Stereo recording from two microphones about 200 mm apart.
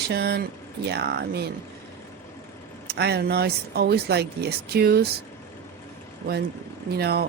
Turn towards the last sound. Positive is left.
turn(degrees=-55)  # may be behind; listen again after turning